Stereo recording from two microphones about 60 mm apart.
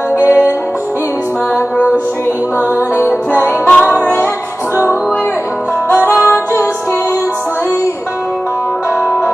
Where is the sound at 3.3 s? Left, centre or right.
Left.